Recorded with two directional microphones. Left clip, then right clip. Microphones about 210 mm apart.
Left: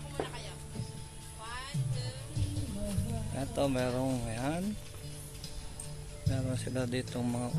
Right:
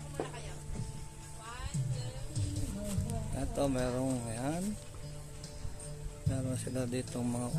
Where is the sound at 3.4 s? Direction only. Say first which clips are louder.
Left 2 dB; centre (ahead or behind).